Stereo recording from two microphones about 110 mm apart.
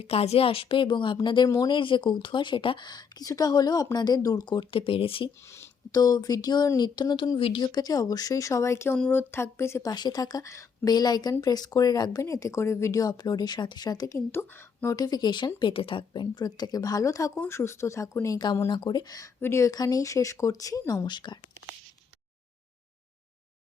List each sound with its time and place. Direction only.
0.0 s speech: 65° left (ahead or behind); by 1.5 s 45° left (ahead or behind)
1.5 s speech: 35° left (ahead or behind)
1.7 s speech: 50° left (ahead or behind)
5.9 s speech: 35° left (ahead or behind)
7.3 s speech: 55° left (ahead or behind)
7.6 s speech: 35° left (ahead or behind)
9.0 s speech: 10° left (ahead or behind)
9.3 s speech: 25° left (ahead or behind)
9.9 s speech: 40° left (ahead or behind)
14.3 s speech: 20° left (ahead or behind)
14.9 s speech: 35° left (ahead or behind)
18.7 s speech: 45° left (ahead or behind)
19.4 s speech: 25° left (ahead or behind); by 21.3 s 40° left (ahead or behind)